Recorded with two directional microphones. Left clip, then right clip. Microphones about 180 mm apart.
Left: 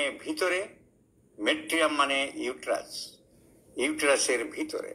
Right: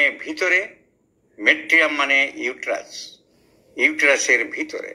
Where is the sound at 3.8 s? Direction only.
10° right (ahead or behind).